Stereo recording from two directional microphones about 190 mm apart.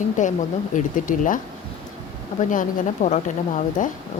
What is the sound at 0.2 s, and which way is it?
Speech, 40° left (ahead or behind).